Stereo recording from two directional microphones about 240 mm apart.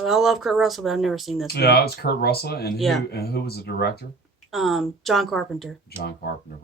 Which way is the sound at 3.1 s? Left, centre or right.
Left.